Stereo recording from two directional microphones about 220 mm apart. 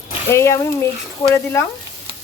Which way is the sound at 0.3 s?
10° left (ahead or behind).